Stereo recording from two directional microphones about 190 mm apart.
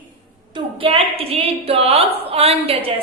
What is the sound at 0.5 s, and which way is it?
A woman's voice, 30° right (ahead or behind).